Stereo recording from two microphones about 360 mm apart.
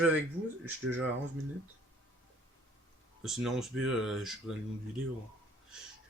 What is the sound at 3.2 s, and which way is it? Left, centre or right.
A man's voice, centre.